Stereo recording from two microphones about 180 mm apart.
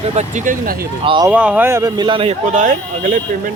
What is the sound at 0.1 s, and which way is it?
Speech, 40° right (ahead or behind).